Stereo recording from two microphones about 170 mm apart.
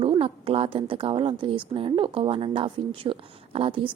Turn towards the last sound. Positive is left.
turn(degrees=-35)  # may be behind; listen again after turning